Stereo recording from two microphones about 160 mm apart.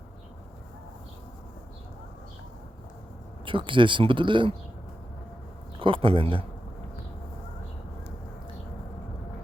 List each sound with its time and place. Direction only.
3.4 s speech: 30° right (ahead or behind)
5.8 s speech: 35° right (ahead or behind)